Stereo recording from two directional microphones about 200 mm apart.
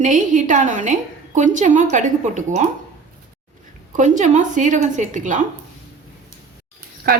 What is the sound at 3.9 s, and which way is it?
A woman's voice, 40° right (ahead or behind).